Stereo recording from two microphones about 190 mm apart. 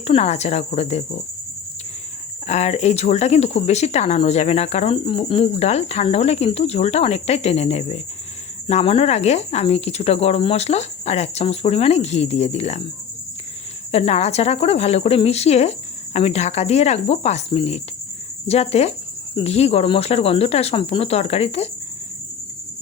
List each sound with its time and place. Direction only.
0.0 s speech: 35° left (ahead or behind)
2.5 s speech: 35° left (ahead or behind)
13.9 s speech: 35° left (ahead or behind)